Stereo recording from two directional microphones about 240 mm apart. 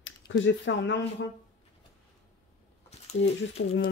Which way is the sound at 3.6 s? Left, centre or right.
Left.